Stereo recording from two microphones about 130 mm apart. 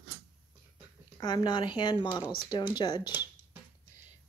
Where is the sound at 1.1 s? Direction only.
35° left (ahead or behind).